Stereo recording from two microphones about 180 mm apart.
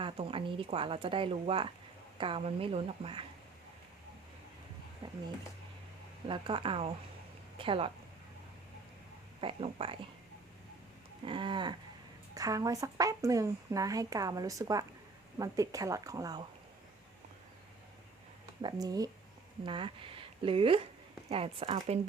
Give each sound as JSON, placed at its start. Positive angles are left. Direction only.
{"t": 0.0, "sound": "a woman's voice", "side_deg": -30}
{"t": 6.2, "sound": "a woman's voice", "side_deg": -30}
{"t": 9.4, "sound": "a woman's voice", "side_deg": -30}
{"t": 11.3, "sound": "speech", "side_deg": -25}
{"t": 18.6, "sound": "a woman's voice", "side_deg": -20}